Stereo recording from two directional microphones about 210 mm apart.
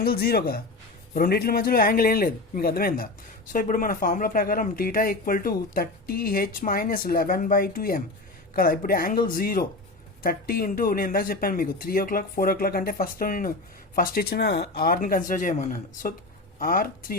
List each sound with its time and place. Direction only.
0.0 s speech: 45° left (ahead or behind)